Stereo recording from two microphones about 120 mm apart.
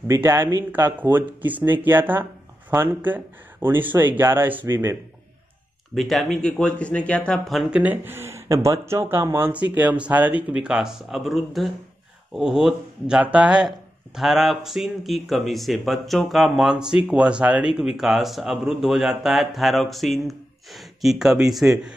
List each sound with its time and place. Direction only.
0.1 s speech: 20° right (ahead or behind)
5.9 s speech: centre (ahead or behind)
7.8 s speech: 15° right (ahead or behind)